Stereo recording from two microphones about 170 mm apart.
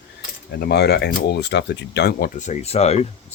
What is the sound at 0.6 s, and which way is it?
Speech, 75° left (ahead or behind).